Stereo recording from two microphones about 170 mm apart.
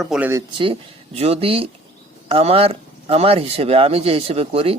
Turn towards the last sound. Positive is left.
turn(degrees=-35)  # may be behind; listen again after turning